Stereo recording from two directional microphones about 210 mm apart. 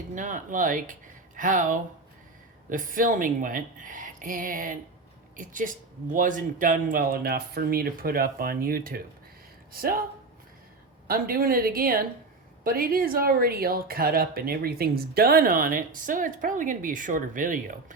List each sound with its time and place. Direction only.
0.1 s speech: 35° right (ahead or behind)
11.1 s speech: 45° right (ahead or behind)